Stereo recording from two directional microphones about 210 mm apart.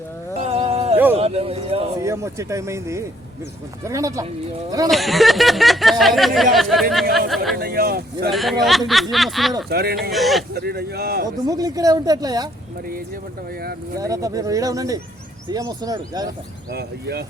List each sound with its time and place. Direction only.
0.3 s a sound: 30° right (ahead or behind)
1.1 s speech: 30° right (ahead or behind)
2.0 s speech: 15° right (ahead or behind)
4.9 s speech: centre (ahead or behind)
7.5 s speech: 45° right (ahead or behind)
8.3 s speech: centre (ahead or behind)
9.6 s speech: 50° right (ahead or behind)
10.1 s speech: centre (ahead or behind)
10.5 s speech: 50° right (ahead or behind)
11.4 s speech: 15° right (ahead or behind)
13.6 s speech: 45° right (ahead or behind)
14.0 s speech: 15° right (ahead or behind)
16.7 s speech: 50° right (ahead or behind)